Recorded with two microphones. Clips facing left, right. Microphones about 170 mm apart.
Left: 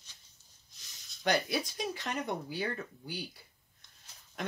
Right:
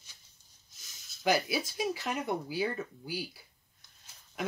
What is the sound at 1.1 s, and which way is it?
Speech, 5° right (ahead or behind).